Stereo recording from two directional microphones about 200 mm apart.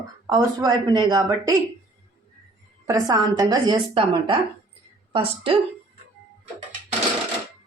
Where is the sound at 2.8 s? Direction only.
15° right (ahead or behind).